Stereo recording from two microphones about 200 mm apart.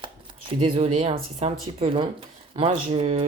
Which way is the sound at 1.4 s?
30° right (ahead or behind).